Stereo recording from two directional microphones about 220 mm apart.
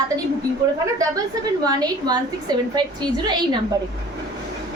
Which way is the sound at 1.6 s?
20° right (ahead or behind).